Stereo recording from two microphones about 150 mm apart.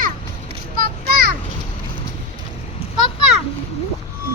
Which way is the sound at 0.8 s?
85° right.